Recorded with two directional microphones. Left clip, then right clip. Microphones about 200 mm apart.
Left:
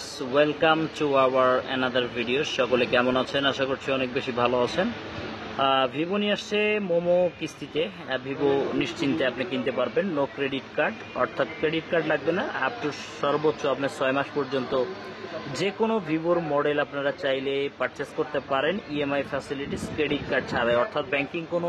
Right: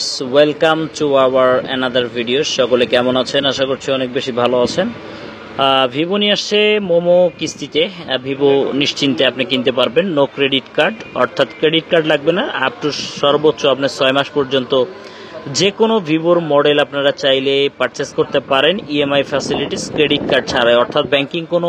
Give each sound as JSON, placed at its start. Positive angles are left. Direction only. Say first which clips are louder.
{"t": 0.3, "sound": "speech", "louder": "right 9 dB", "side_deg": -35}
{"t": 8.7, "sound": "speech", "louder": "right 11 dB", "side_deg": -45}
{"t": 13.2, "sound": "speech", "louder": "right 12 dB", "side_deg": -35}
{"t": 15.8, "sound": "speech", "louder": "right 9 dB", "side_deg": -40}